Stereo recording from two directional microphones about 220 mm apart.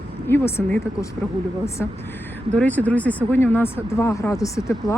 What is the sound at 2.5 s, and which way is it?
Speech, 5° left (ahead or behind).